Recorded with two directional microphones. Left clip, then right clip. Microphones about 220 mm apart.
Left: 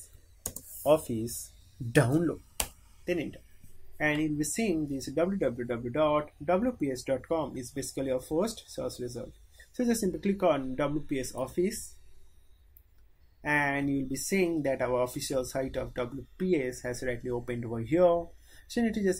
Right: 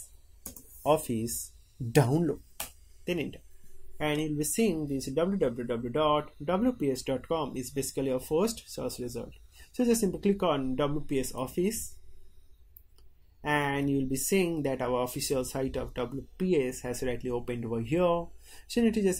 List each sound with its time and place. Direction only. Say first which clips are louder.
0.8 s speech: left 1 dB; 20° right (ahead or behind)
4.0 s speech: left 2 dB; 25° right (ahead or behind)
13.4 s speech: left 1 dB; 25° right (ahead or behind)